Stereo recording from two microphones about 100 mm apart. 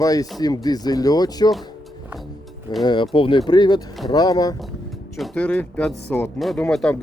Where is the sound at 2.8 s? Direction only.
50° left (ahead or behind).